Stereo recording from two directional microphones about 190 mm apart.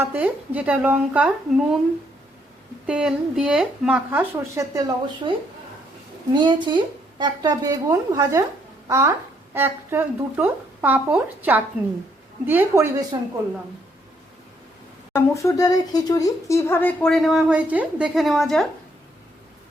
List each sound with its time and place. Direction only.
0.0 s speech: 10° right (ahead or behind)
2.8 s speech: 5° right (ahead or behind)
5.3 s a woman's voice: 25° right (ahead or behind)
15.1 s speech: 15° left (ahead or behind)